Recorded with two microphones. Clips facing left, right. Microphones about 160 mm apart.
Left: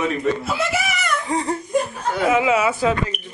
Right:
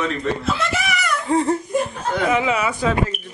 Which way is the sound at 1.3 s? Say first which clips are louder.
Right 3 dB; 15° left (ahead or behind).